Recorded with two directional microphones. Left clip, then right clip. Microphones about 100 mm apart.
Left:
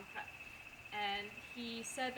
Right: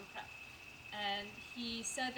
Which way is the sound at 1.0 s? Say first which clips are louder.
Even; 20° right (ahead or behind).